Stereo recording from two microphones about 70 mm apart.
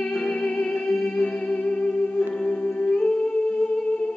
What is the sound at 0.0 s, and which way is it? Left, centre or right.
Music, centre.